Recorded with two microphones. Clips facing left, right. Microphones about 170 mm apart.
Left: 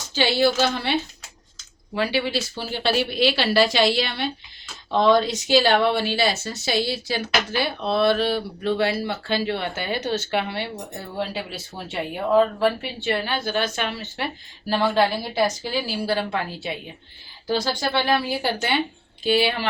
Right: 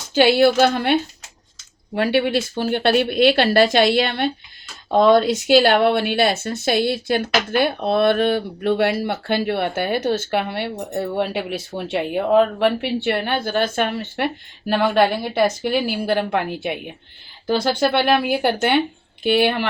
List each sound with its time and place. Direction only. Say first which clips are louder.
0.1 s a woman's voice: right 6 dB; 55° right (ahead or behind)
2.0 s a woman's voice: right 5 dB; 55° right (ahead or behind)